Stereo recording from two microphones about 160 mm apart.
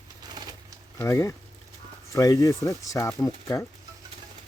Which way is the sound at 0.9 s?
15° left (ahead or behind).